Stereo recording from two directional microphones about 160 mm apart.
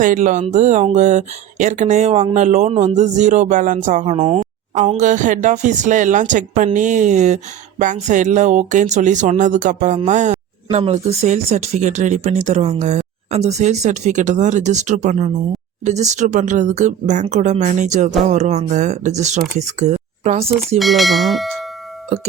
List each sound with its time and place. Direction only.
0.0 s speech: 55° right (ahead or behind)
20.7 s speech: centre (ahead or behind)